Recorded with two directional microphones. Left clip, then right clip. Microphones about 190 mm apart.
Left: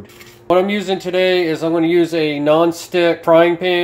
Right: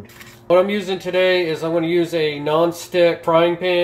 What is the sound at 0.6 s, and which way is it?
Speech, 30° left (ahead or behind).